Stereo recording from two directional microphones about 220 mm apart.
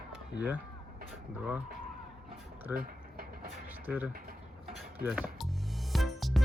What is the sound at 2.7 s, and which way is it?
Vehicle, 40° right (ahead or behind).